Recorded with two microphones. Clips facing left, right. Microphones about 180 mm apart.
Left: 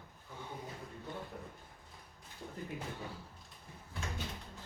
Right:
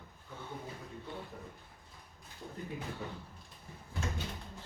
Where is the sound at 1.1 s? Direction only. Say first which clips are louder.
Even; 45° left (ahead or behind).